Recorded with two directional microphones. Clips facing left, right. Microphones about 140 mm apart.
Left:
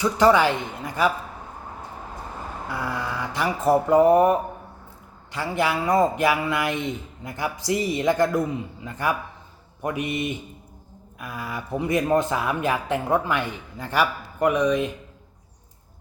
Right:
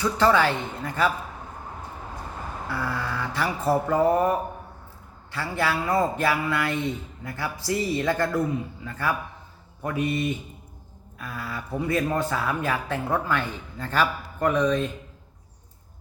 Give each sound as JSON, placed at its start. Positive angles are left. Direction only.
{"t": 0.0, "sound": "speech", "side_deg": 15}
{"t": 2.6, "sound": "speech", "side_deg": 15}